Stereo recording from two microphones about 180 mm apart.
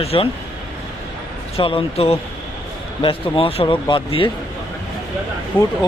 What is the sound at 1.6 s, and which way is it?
A man's voice, 30° left (ahead or behind).